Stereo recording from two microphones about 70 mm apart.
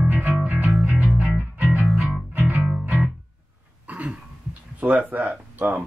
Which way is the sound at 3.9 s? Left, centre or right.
Right.